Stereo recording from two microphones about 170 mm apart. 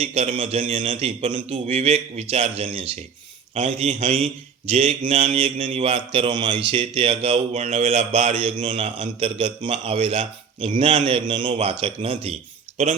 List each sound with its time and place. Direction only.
0.0 s speech: 40° right (ahead or behind)